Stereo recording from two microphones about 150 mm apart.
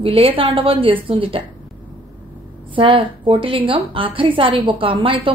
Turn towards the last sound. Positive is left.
turn(degrees=-35)  # may be behind; listen again after turning